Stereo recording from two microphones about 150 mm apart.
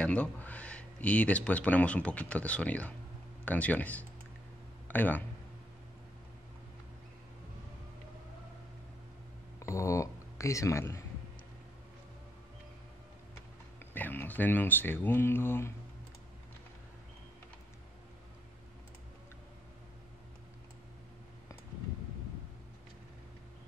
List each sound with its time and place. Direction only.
0.0 s speech: 10° left (ahead or behind)
9.6 s speech: 20° left (ahead or behind)
13.7 s speech: 15° left (ahead or behind)